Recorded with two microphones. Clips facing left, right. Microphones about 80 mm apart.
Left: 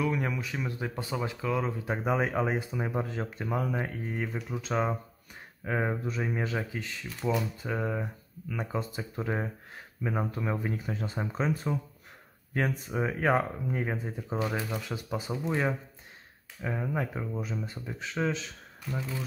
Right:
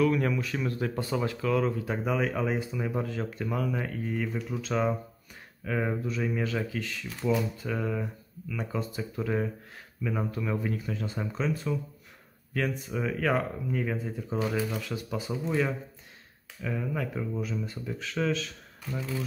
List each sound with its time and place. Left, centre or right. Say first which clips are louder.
0.0 s speech: right 5 dB; centre
5.7 s speech: even; left
7.2 s speech: right 2 dB; centre
7.6 s speech: right 1 dB; left
18.9 s speech: right 2 dB; centre